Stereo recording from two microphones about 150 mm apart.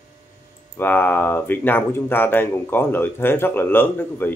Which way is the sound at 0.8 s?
10° left (ahead or behind).